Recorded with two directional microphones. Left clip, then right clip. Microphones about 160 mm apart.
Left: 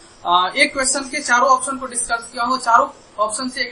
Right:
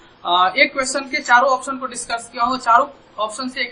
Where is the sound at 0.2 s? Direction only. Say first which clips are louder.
Right 1 dB; 10° left (ahead or behind).